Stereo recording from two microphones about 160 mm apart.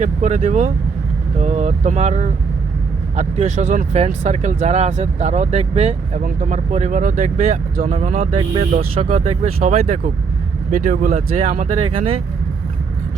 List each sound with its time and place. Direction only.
0.0 s speech: 45° right (ahead or behind)
6.2 s speech: 50° right (ahead or behind)
7.9 s speech: 40° right (ahead or behind)
9.0 s speech: 45° right (ahead or behind)